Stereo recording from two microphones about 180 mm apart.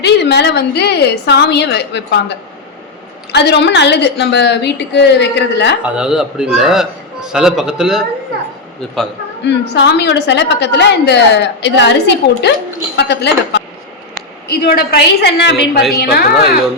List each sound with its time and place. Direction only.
0.0 s a woman's voice: 70° left (ahead or behind)
3.3 s a woman's voice: 70° left (ahead or behind)
5.8 s a man's voice: 5° right (ahead or behind)
9.4 s a woman's voice: 75° left (ahead or behind)
14.6 s a woman's voice: 55° left (ahead or behind)